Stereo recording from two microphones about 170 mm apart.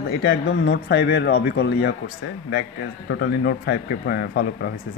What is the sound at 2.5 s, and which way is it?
A man's voice, 80° left.